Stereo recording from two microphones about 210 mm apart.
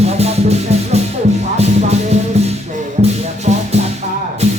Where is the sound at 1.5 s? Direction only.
30° right (ahead or behind).